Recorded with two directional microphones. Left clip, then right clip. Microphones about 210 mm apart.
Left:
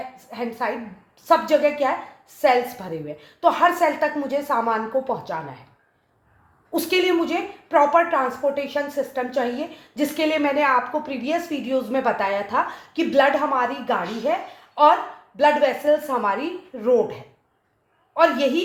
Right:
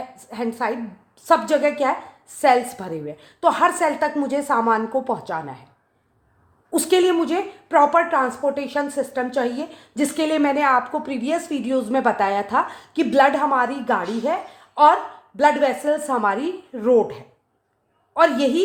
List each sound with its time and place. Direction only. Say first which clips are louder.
0.3 s a woman's voice: right 2 dB; 50° right (ahead or behind)
6.7 s a woman's voice: right 2 dB; 55° right (ahead or behind)